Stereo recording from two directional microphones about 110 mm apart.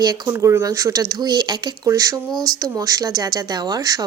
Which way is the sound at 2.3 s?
5° left (ahead or behind).